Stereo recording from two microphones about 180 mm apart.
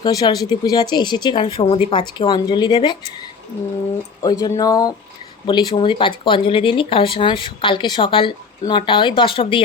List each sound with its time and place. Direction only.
0.0 s speech: 20° left (ahead or behind)
4.2 s speech: 20° left (ahead or behind)